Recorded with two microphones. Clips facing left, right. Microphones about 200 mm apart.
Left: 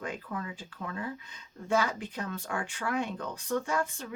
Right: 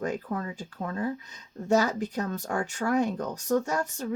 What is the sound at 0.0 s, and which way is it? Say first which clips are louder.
Speech: right 6 dB; 45° right (ahead or behind).